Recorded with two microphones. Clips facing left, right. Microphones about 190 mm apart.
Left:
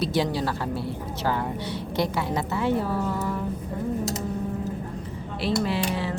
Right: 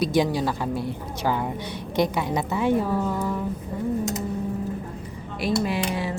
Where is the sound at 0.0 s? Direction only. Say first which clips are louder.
Right 3 dB; 15° right (ahead or behind).